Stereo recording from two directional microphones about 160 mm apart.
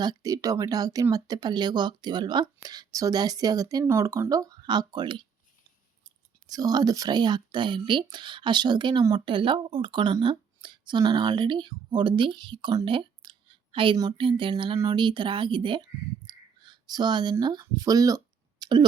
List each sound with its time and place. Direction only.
0.0 s speech: 25° right (ahead or behind)
6.5 s speech: 25° right (ahead or behind)